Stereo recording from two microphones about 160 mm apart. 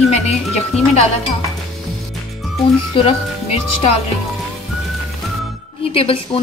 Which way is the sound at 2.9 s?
35° left (ahead or behind).